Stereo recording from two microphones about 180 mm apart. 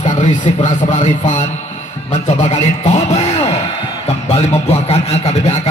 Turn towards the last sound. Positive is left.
turn(degrees=40)  # may be behind; listen again after turning